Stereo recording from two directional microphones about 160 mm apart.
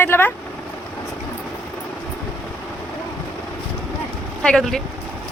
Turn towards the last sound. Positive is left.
turn(degrees=0)  # may be behind; listen again after turning